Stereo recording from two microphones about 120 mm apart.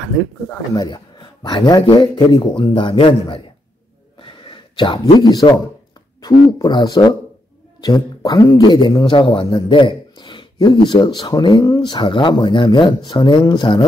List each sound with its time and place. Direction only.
0.7 s a man's voice: 35° left (ahead or behind)
4.2 s a sound: 45° left (ahead or behind)
6.2 s a man's voice: 35° left (ahead or behind)